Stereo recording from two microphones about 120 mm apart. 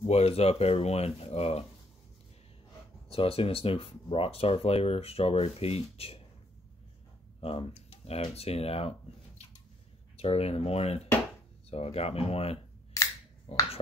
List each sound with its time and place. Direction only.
0.0 s speech: 55° left (ahead or behind)
3.1 s speech: 55° left (ahead or behind)
7.3 s speech: 55° left (ahead or behind)
10.1 s speech: 60° left (ahead or behind)
13.0 s finger snapping: 25° left (ahead or behind)
13.5 s speech: 60° left (ahead or behind)